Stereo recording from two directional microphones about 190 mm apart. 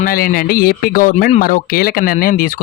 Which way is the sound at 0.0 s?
50° left (ahead or behind).